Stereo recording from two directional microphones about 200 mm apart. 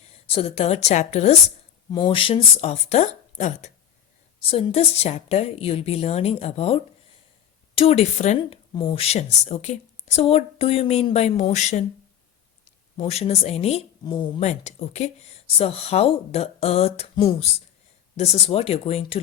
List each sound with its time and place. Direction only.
0.3 s speech: 30° left (ahead or behind)
1.9 s speech: 25° left (ahead or behind)
13.0 s speech: 30° left (ahead or behind)
18.2 s speech: 30° left (ahead or behind)